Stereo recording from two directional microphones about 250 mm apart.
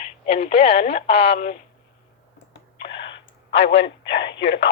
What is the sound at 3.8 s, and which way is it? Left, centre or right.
Speech, left.